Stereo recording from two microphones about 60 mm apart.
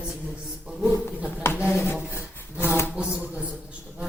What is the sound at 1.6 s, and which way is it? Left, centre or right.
Rub, left.